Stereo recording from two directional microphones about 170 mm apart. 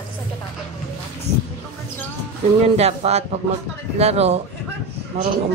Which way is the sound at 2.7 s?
40° right (ahead or behind).